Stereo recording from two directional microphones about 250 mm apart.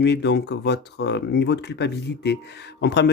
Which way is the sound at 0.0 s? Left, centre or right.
Left.